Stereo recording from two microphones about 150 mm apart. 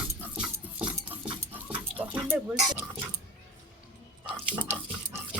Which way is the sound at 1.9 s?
10° right (ahead or behind).